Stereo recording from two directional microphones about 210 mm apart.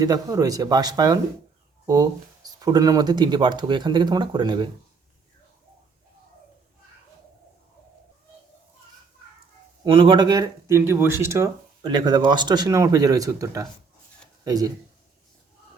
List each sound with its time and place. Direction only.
0.0 s speech: 20° right (ahead or behind)
9.8 s speech: 25° right (ahead or behind)